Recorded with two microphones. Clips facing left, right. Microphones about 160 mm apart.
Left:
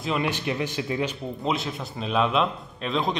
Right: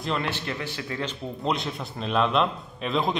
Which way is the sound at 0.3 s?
15° left (ahead or behind).